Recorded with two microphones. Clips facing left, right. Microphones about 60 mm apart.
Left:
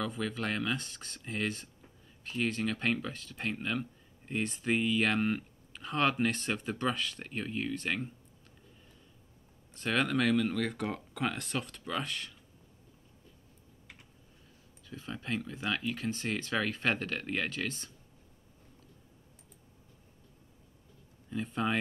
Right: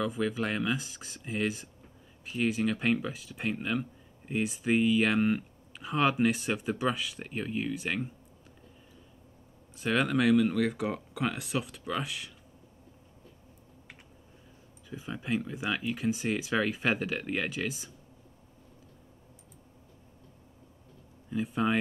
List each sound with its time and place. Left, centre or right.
0.0 s speech: centre
9.8 s speech: centre
14.9 s speech: centre
21.3 s speech: centre